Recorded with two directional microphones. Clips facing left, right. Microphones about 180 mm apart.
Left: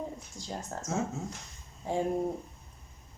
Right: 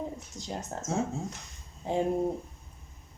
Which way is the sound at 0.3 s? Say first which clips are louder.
Right 1 dB; 20° right (ahead or behind).